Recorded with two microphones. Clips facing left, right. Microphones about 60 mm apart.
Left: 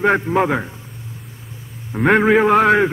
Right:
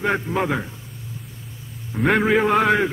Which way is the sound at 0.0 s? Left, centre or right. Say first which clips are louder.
Left 6 dB; left.